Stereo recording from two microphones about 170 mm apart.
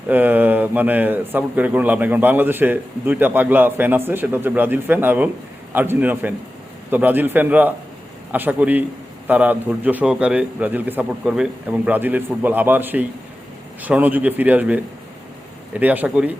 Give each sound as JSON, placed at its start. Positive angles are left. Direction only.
{"t": 0.1, "sound": "a man's voice", "side_deg": -10}